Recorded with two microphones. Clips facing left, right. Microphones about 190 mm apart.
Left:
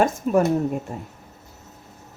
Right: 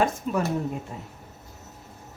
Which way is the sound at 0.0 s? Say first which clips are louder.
Left 6 dB; 45° left (ahead or behind).